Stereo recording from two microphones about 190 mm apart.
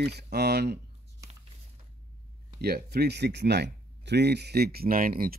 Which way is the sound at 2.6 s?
55° right (ahead or behind).